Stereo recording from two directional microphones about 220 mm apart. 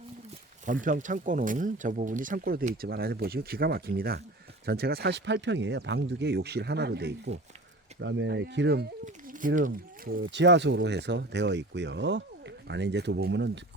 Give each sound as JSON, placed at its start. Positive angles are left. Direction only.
{"t": 0.6, "sound": "speech", "side_deg": -35}